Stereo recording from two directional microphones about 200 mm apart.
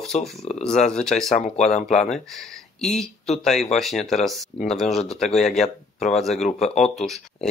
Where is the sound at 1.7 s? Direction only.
35° left (ahead or behind).